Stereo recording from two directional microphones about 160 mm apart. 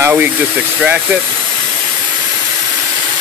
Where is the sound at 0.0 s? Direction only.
10° right (ahead or behind).